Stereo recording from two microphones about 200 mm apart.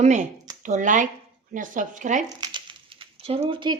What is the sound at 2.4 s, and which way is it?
Crumpling, 25° right (ahead or behind).